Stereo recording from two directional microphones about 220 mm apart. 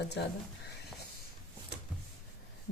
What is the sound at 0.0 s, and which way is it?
Speech, 50° left (ahead or behind).